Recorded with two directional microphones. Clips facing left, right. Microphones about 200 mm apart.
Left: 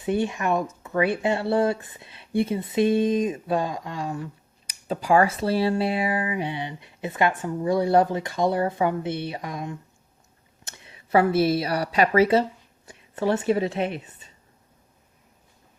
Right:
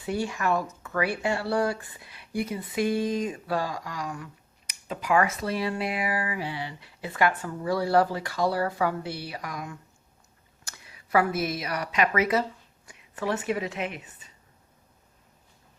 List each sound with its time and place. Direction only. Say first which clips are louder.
0.0 s a woman's voice: left 4 dB; 20° left (ahead or behind)